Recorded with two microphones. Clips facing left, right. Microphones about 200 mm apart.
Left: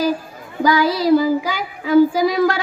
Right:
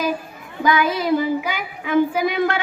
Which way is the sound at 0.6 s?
35° left (ahead or behind).